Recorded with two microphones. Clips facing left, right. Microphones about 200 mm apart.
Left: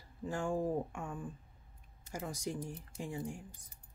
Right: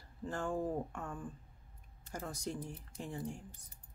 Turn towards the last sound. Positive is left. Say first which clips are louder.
# left 1 dB
turn(degrees=10)  # may be behind; listen again after turning